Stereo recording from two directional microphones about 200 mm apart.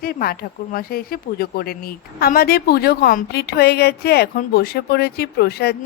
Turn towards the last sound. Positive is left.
turn(degrees=50)  # may be behind; listen again after turning